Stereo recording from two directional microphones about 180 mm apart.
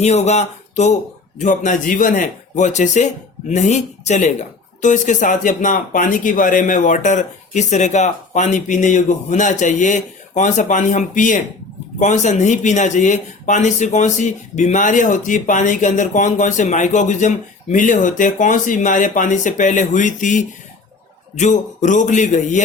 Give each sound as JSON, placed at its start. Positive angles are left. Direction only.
{"t": 0.0, "sound": "speech", "side_deg": 35}